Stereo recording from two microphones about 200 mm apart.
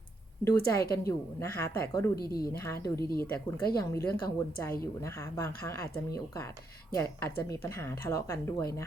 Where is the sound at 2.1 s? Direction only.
50° left (ahead or behind).